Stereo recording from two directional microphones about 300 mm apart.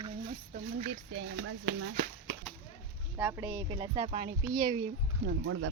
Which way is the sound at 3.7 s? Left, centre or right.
Centre.